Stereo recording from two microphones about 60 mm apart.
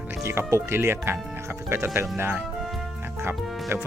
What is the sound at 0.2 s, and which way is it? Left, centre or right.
Speech, right.